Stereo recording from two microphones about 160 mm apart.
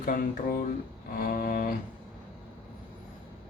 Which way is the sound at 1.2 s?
65° left (ahead or behind).